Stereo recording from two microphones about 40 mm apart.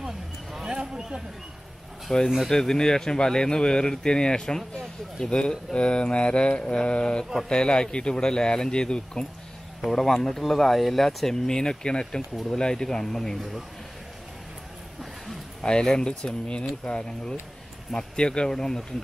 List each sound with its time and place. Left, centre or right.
0.0 s a sound: centre
0.7 s a sound: right
2.0 s speech: centre; by 9.2 s left
9.8 s speech: centre
13.4 s speech: centre
15.6 s speech: centre